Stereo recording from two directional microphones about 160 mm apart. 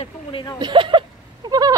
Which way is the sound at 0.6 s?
30° right (ahead or behind).